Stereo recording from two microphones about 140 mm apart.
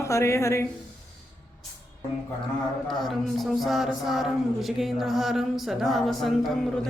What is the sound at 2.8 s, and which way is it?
A man's voice, centre (ahead or behind).